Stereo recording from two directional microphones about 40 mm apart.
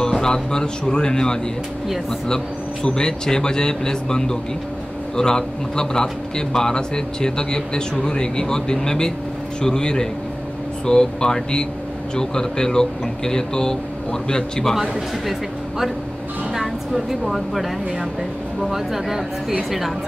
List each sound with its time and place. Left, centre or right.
0.0 s a man's voice: centre
16.5 s speech: centre